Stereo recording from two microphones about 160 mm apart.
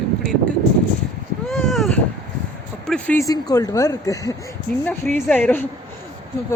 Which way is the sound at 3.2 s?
25° left (ahead or behind).